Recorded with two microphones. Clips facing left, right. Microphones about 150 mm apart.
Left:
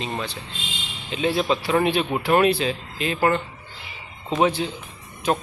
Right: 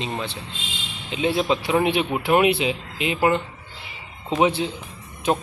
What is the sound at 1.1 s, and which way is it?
Speech, 20° right (ahead or behind).